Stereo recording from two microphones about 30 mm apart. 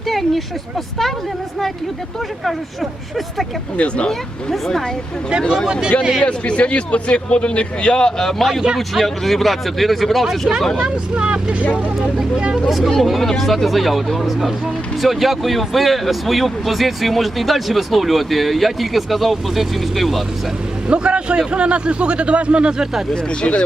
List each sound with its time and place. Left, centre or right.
0.1 s a sound: centre
3.8 s a man's voice: left
6.0 s speech: right
6.2 s a man's voice: left
8.4 s speech: centre
11.1 s a man's voice: right
12.6 s speech: centre
20.8 s a man's voice: right
23.4 s a man's voice: left